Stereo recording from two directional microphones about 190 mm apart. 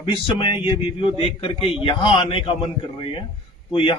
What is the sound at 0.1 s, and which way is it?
A man's voice, 25° left (ahead or behind).